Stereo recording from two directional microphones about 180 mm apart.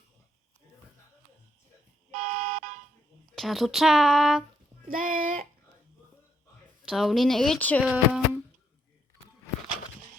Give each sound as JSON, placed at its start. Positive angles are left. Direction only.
{"t": 2.1, "sound": "car alarm", "side_deg": -40}
{"t": 3.2, "sound": "speech", "side_deg": 0}
{"t": 4.9, "sound": "speech", "side_deg": -50}
{"t": 6.8, "sound": "speech", "side_deg": 0}
{"t": 7.9, "sound": "speech", "side_deg": -5}